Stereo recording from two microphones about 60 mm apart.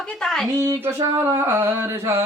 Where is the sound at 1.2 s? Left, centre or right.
Right.